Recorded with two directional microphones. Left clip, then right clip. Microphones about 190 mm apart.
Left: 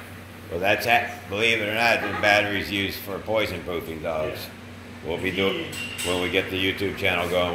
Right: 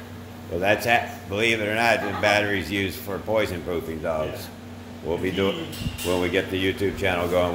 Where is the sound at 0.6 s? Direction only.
30° right (ahead or behind).